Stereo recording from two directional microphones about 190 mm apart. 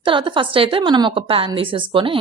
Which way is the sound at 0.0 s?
25° right (ahead or behind).